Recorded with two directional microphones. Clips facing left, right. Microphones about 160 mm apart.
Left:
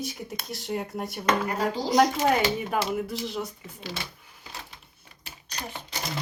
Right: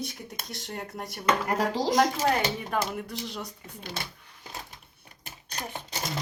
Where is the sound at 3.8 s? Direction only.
50° right (ahead or behind).